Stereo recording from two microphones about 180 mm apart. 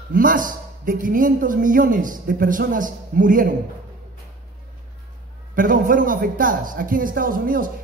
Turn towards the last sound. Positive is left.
turn(degrees=-50)  # may be behind; listen again after turning